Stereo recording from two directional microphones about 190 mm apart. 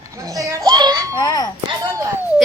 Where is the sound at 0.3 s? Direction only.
20° right (ahead or behind).